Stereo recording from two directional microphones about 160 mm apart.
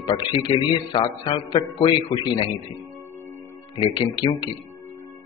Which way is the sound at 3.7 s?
30° left (ahead or behind).